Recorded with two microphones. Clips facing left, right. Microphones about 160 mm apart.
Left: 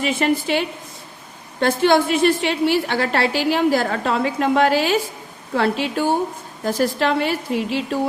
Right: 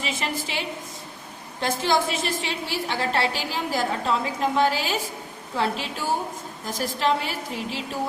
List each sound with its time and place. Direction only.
0.0 s a woman's voice: 60° left (ahead or behind)
1.6 s a woman's voice: 60° left (ahead or behind)